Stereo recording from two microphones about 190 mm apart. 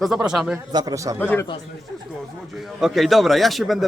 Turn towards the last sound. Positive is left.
turn(degrees=0)  # may be behind; listen again after turning